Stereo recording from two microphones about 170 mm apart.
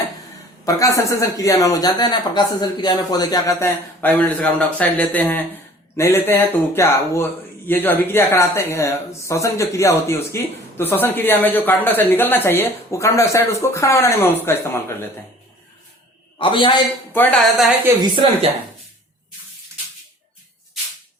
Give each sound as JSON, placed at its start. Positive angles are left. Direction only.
{"t": 0.6, "sound": "a woman's voice", "side_deg": 20}
{"t": 16.4, "sound": "a woman's voice", "side_deg": 30}
{"t": 17.2, "sound": "speech", "side_deg": 5}
{"t": 18.0, "sound": "a woman's voice", "side_deg": -35}